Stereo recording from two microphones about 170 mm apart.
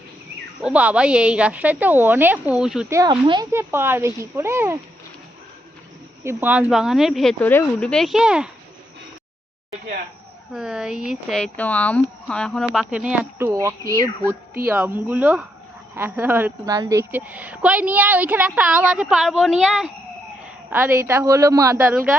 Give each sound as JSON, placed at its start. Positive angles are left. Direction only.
{"t": 0.6, "sound": "a woman's voice", "side_deg": -5}
{"t": 2.9, "sound": "speech", "side_deg": -25}
{"t": 3.5, "sound": "a woman's voice", "side_deg": -15}
{"t": 6.2, "sound": "speech", "side_deg": -10}
{"t": 10.5, "sound": "speech", "side_deg": -5}
{"t": 13.5, "sound": "a woman's voice", "side_deg": -20}
{"t": 13.8, "sound": "speech", "side_deg": -60}
{"t": 14.8, "sound": "a woman's voice", "side_deg": -10}
{"t": 20.7, "sound": "a woman's voice", "side_deg": -10}
{"t": 21.9, "sound": "speech", "side_deg": -5}